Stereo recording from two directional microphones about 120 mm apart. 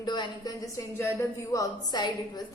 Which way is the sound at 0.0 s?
35° left (ahead or behind).